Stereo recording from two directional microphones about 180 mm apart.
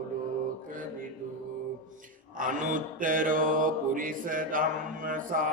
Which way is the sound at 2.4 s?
50° right (ahead or behind).